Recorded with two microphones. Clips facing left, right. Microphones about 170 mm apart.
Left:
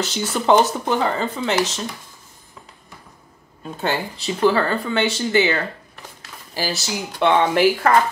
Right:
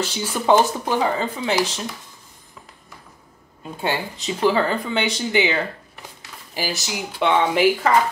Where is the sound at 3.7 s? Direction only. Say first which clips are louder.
Left 1 dB; 15° right (ahead or behind).